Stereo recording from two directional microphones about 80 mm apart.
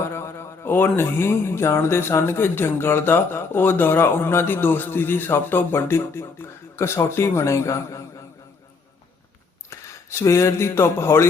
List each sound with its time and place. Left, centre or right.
0.1 s a man's voice: left
9.6 s speech: left